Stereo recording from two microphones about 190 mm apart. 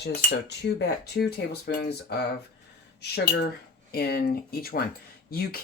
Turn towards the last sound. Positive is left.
turn(degrees=50)  # may be behind; listen again after turning